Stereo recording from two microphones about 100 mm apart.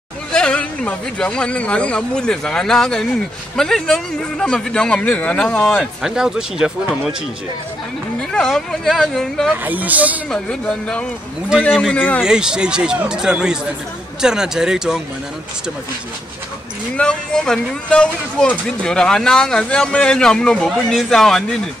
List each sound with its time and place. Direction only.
0.3 s speech: 10° left (ahead or behind)
6.0 s speech: 5° right (ahead or behind)
8.2 s speech: 5° left (ahead or behind)
9.5 s speech: 15° right (ahead or behind)
10.3 s speech: 10° left (ahead or behind)
12.2 s speech: 5° right (ahead or behind)
16.9 s speech: 10° left (ahead or behind)